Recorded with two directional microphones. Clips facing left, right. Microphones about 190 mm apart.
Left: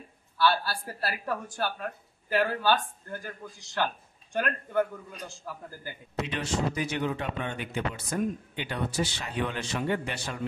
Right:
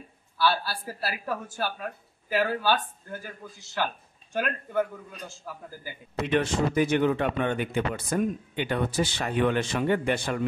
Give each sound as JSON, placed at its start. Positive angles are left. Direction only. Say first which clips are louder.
{"t": 0.4, "sound": "a woman's voice", "louder": "even", "side_deg": -5}
{"t": 6.2, "sound": "speech", "louder": "right 6 dB", "side_deg": -55}